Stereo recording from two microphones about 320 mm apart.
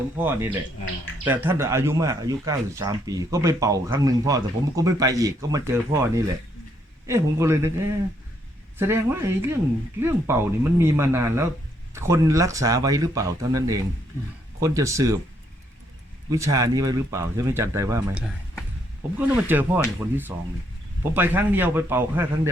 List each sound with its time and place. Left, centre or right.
0.2 s speech: centre
16.3 s speech: centre